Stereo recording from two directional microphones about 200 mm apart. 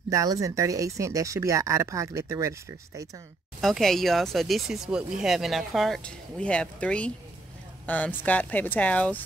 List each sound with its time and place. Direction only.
0.1 s speech: 15° right (ahead or behind)
3.6 s speech: centre (ahead or behind)